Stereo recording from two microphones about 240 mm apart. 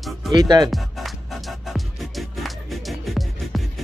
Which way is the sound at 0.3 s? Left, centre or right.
Centre.